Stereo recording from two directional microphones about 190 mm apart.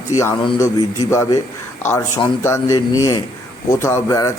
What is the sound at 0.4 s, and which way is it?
A man's voice, 20° left (ahead or behind).